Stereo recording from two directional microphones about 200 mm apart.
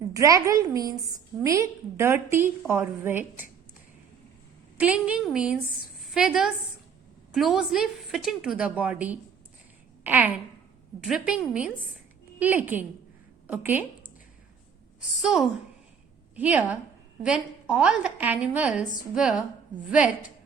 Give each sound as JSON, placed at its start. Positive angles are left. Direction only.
{"t": 0.1, "sound": "a woman's voice", "side_deg": -15}
{"t": 4.8, "sound": "a woman's voice", "side_deg": -5}
{"t": 15.2, "sound": "a woman's voice", "side_deg": -5}